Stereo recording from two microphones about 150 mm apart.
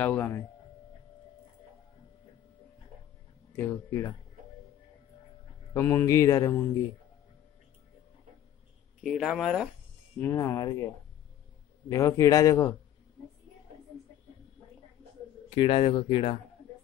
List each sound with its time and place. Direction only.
0.0 s speech: 15° left (ahead or behind)
3.5 s speech: 15° left (ahead or behind)
5.7 s speech: 15° left (ahead or behind)
9.0 s speech: centre (ahead or behind)
10.2 s a man's voice: 15° left (ahead or behind)
11.9 s a man's voice: 20° left (ahead or behind)
15.5 s speech: 35° left (ahead or behind)